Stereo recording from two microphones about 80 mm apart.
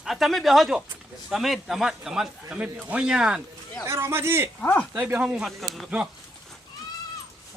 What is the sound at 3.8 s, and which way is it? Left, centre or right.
A man's voice, right.